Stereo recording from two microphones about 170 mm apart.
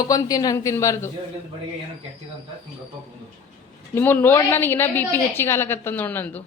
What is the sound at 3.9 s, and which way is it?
Speech, 15° left (ahead or behind).